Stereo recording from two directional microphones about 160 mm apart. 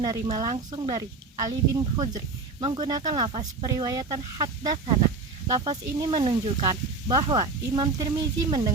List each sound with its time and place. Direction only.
0.0 s speech: 25° right (ahead or behind)